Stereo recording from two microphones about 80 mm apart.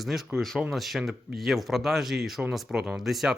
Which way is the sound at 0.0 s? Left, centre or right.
Centre.